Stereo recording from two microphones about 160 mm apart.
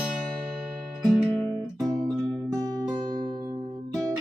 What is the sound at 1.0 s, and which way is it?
Guitar, centre (ahead or behind).